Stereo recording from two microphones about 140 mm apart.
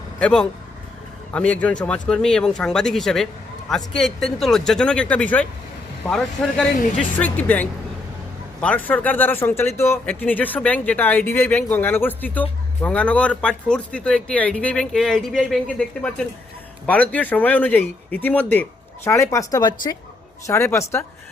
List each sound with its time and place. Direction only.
0.2 s speech: 10° left (ahead or behind); by 20.0 s 30° left (ahead or behind)
20.5 s speech: 20° left (ahead or behind)